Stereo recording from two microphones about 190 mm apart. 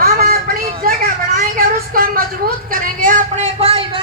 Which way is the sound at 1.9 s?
50° right (ahead or behind).